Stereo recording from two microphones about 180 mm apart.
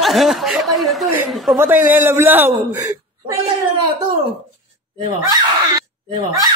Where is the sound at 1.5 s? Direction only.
10° right (ahead or behind).